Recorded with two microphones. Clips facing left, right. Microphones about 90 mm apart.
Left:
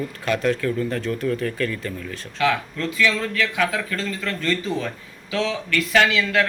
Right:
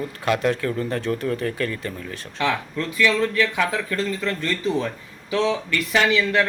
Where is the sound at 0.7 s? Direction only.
35° right (ahead or behind).